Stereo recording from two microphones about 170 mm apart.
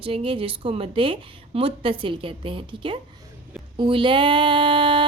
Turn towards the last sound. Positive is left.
turn(degrees=-30)  # may be behind; listen again after turning